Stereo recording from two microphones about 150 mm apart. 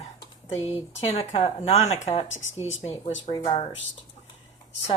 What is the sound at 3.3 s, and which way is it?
Speech, 35° left (ahead or behind).